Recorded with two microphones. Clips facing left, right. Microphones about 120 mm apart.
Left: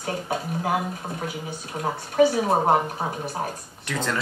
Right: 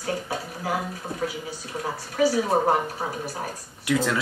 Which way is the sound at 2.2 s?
25° left (ahead or behind).